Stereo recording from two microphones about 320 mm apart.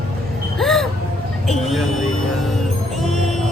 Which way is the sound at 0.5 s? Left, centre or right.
Centre.